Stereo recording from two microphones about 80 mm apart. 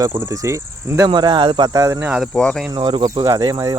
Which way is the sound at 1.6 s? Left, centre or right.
Right.